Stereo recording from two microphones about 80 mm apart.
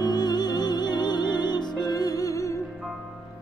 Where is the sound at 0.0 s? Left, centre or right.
Left.